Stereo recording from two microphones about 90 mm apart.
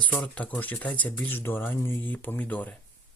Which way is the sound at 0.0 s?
15° left (ahead or behind).